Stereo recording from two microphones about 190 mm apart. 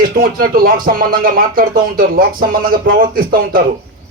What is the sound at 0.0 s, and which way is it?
Speech, 50° right (ahead or behind).